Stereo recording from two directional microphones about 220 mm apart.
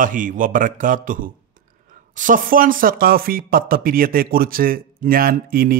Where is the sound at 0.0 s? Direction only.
35° right (ahead or behind).